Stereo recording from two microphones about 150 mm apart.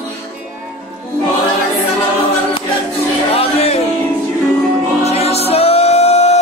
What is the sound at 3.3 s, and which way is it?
Music, 40° left (ahead or behind).